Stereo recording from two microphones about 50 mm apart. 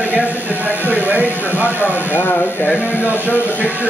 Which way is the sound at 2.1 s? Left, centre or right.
Left.